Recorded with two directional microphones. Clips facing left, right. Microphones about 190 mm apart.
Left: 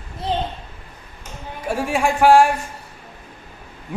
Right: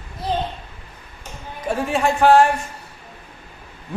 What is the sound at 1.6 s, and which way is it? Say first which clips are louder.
Speech: even; 10° left (ahead or behind).